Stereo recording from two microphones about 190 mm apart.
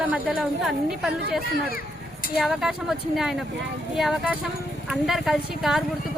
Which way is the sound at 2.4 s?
Centre (ahead or behind).